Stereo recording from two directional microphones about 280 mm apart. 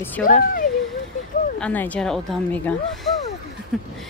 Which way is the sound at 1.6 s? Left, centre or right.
Centre.